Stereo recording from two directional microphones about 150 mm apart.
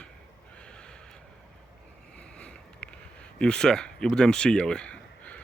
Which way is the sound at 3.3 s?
5° left (ahead or behind).